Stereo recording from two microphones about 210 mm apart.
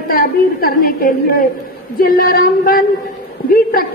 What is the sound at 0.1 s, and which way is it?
A woman's voice, 45° left (ahead or behind).